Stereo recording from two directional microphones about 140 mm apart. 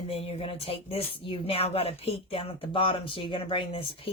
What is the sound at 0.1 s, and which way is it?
Speech, 45° left (ahead or behind).